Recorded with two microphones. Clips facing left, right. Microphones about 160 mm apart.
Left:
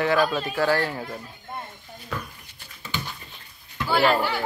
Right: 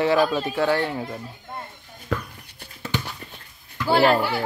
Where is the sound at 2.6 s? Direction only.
65° right (ahead or behind).